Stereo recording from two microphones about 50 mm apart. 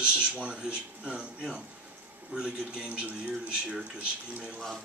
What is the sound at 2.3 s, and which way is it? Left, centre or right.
Speech, centre.